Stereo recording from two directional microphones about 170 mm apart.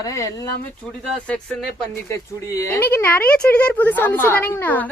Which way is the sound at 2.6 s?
15° left (ahead or behind).